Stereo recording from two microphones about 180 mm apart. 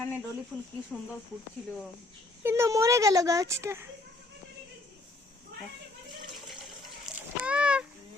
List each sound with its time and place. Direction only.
0.5 s speech: 5° right (ahead or behind)
2.4 s speech: 15° right (ahead or behind)
6.5 s a sound: centre (ahead or behind)